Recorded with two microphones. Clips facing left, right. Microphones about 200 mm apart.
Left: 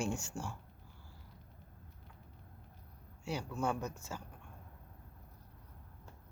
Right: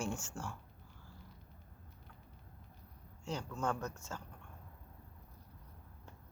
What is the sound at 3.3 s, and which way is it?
Speech, 10° left (ahead or behind).